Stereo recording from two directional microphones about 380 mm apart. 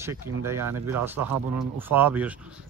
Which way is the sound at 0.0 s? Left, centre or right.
Centre.